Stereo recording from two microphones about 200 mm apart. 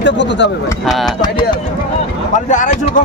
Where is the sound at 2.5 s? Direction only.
40° left (ahead or behind).